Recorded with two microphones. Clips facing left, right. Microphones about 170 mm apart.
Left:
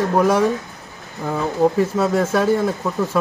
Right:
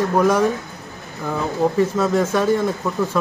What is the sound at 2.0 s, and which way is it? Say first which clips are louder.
Speech: even; 10° left (ahead or behind).